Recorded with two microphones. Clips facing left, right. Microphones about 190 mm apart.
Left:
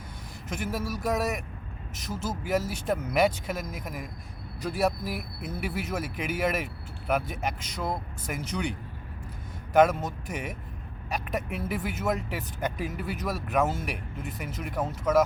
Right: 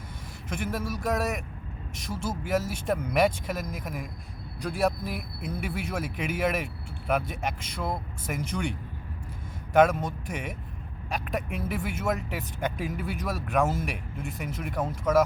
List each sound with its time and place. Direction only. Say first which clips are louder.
0.5 s speech: even; 5° left (ahead or behind)
9.7 s speech: even; 5° left (ahead or behind)